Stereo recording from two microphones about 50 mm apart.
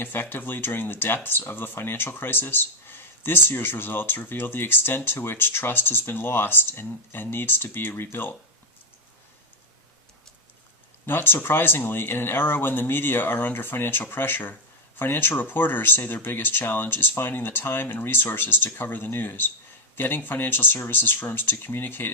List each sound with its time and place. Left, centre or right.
0.0 s speech: left
11.0 s speech: left